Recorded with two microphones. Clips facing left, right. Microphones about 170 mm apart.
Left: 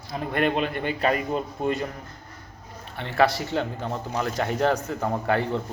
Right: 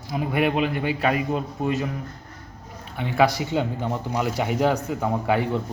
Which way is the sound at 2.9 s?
10° right (ahead or behind).